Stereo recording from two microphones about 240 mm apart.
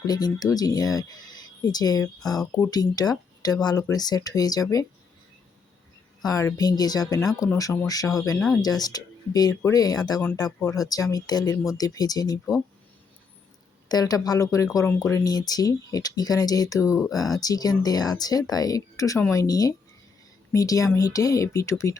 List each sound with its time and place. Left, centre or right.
0.1 s speech: centre
6.2 s speech: centre
13.8 s speech: centre